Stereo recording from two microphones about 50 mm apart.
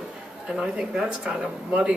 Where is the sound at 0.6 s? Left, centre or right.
Centre.